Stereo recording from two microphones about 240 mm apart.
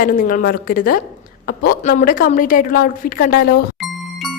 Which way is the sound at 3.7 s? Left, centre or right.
Centre.